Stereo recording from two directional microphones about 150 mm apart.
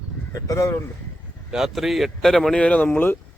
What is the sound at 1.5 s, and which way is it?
Speech, centre (ahead or behind).